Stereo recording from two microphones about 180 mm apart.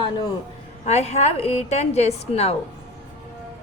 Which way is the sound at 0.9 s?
35° left (ahead or behind).